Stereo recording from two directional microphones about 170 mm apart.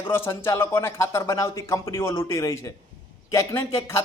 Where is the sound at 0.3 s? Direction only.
15° left (ahead or behind).